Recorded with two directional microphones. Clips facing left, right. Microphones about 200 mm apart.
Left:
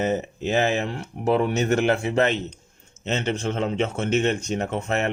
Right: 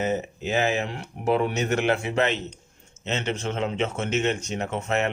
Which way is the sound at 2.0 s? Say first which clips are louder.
Left 3 dB; 45° left (ahead or behind).